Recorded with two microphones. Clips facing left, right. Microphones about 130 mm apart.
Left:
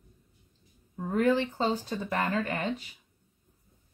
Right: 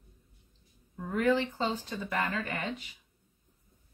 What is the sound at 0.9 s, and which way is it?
Speech, 35° left (ahead or behind).